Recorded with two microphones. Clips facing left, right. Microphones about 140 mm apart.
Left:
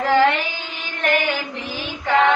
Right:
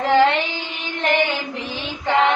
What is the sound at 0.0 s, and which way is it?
Child singing, 30° right (ahead or behind).